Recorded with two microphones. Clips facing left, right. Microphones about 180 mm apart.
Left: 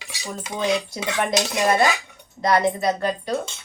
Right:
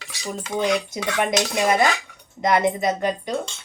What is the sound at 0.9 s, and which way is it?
Speech, 20° right (ahead or behind).